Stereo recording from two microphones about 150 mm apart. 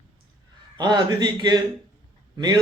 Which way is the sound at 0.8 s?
30° right (ahead or behind).